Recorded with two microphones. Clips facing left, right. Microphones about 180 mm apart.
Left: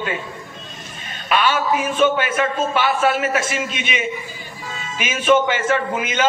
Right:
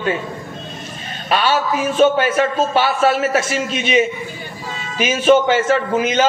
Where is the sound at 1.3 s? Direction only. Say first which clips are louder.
Right 1 dB; 35° right (ahead or behind).